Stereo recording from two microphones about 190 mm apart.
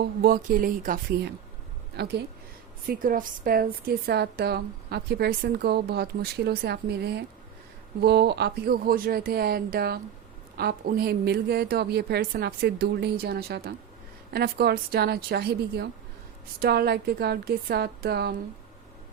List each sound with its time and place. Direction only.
0.2 s speech: 50° right (ahead or behind)
2.0 s a woman's voice: 60° right (ahead or behind)
2.8 s a woman's voice: 50° right (ahead or behind)